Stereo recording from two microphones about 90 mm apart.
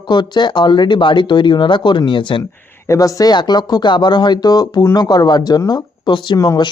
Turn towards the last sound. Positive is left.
turn(degrees=55)  # may be behind; listen again after turning